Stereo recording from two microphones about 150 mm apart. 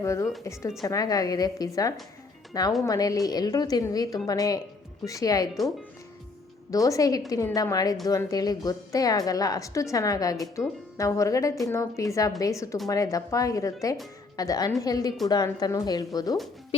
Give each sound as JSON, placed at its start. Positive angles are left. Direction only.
{"t": 0.0, "sound": "a woman's voice", "side_deg": 20}
{"t": 6.7, "sound": "a woman's voice", "side_deg": 20}